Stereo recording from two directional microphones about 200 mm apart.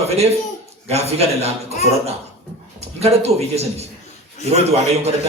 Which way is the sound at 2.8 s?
30° right (ahead or behind).